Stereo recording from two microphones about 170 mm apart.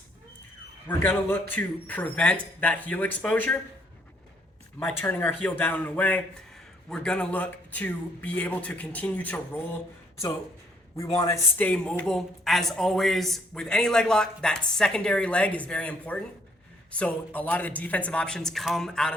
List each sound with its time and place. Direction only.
0.9 s speech: 10° left (ahead or behind)
4.9 s speech: 10° left (ahead or behind)
10.9 s a man's voice: 20° left (ahead or behind)
11.5 s speech: 10° left (ahead or behind)